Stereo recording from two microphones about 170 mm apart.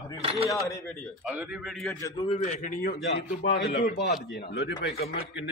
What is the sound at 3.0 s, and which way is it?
A man's voice, 90° left.